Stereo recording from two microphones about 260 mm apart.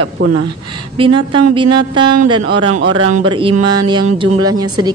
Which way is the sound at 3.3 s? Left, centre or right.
Centre.